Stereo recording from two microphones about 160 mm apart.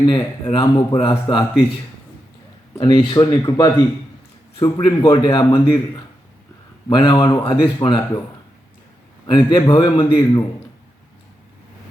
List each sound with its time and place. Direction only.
0.0 s speech: 30° left (ahead or behind)
2.7 s speech: 30° left (ahead or behind)
6.8 s speech: 30° left (ahead or behind)
9.2 s speech: 30° left (ahead or behind)